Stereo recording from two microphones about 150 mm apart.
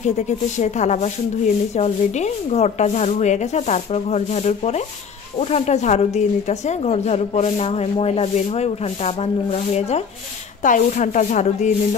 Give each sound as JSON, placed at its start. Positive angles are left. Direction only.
{"t": 0.0, "sound": "speech", "side_deg": 50}
{"t": 10.6, "sound": "speech", "side_deg": 60}